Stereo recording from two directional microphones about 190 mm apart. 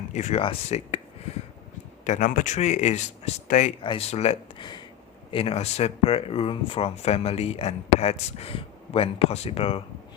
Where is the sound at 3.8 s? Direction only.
30° left (ahead or behind).